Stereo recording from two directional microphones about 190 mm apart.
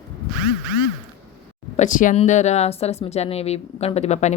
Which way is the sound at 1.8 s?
45° left (ahead or behind).